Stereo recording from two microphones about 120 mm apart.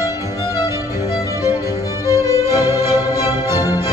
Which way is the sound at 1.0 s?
30° left (ahead or behind).